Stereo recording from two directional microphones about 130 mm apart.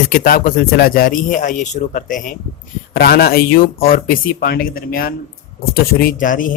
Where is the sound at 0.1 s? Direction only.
90° left.